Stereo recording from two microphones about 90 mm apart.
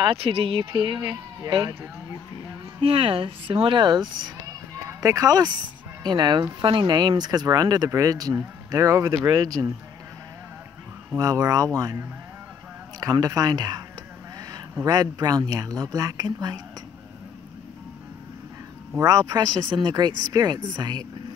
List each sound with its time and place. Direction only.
0.0 s speech: 90° right; by 1.7 s 50° right (ahead or behind)
2.8 s speech: 90° right; by 4.3 s 55° right (ahead or behind)
4.8 s speech: 35° right (ahead or behind)
6.0 s speech: 55° right (ahead or behind)
6.6 s a woman's voice: 65° right (ahead or behind); by 9.7 s 45° right (ahead or behind)
11.1 s speech: 40° right (ahead or behind)
13.0 s a woman's voice: 45° right (ahead or behind)
18.9 s a woman's voice: 40° right (ahead or behind)